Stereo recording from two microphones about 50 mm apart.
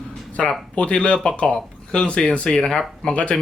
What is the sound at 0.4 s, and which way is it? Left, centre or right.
Speech, left.